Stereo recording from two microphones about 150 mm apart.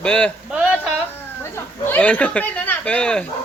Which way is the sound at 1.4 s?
15° left (ahead or behind).